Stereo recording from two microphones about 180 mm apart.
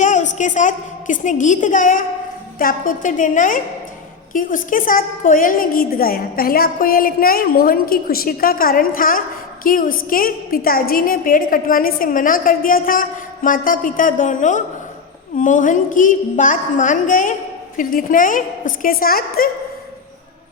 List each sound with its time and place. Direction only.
0.0 s a woman's voice: 45° left (ahead or behind)